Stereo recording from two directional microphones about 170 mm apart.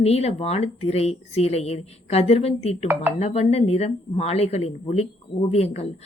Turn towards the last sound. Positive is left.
turn(degrees=35)  # may be behind; listen again after turning